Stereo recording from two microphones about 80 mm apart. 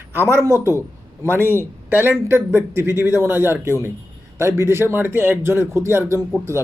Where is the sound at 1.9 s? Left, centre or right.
Right.